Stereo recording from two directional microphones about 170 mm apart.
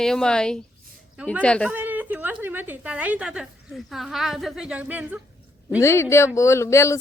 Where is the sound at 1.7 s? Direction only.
10° right (ahead or behind).